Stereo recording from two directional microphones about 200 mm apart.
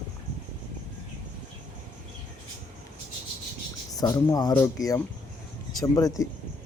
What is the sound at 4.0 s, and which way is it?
Speech, 20° left (ahead or behind).